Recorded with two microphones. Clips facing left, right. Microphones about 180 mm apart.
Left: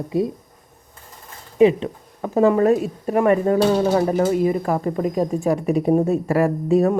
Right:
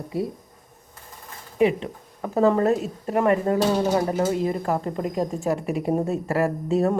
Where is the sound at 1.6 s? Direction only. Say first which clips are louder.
Left 6 dB; 20° left (ahead or behind).